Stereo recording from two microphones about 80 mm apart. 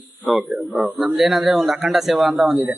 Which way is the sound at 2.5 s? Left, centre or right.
Right.